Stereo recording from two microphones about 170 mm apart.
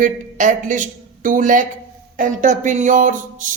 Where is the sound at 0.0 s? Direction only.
50° right (ahead or behind).